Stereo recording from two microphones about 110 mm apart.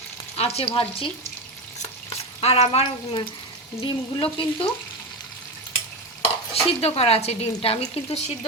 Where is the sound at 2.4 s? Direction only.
65° left (ahead or behind).